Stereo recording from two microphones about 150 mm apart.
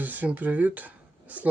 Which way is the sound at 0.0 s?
10° right (ahead or behind).